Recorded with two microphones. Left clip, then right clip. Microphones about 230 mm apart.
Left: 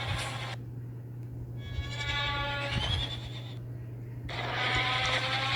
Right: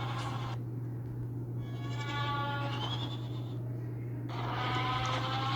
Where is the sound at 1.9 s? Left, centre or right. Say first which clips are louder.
Left 4 dB; left.